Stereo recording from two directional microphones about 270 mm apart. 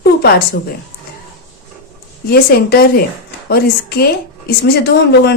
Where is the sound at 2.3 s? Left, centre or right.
Left.